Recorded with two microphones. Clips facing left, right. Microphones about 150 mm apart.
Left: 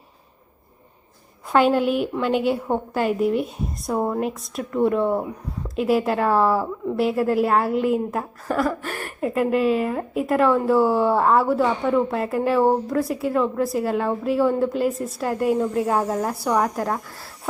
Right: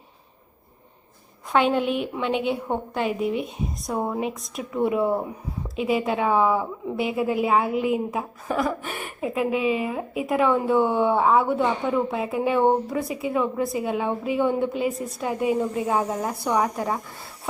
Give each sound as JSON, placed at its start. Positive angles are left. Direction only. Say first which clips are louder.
{"t": 1.5, "sound": "a woman's voice", "louder": "left 3 dB", "side_deg": 0}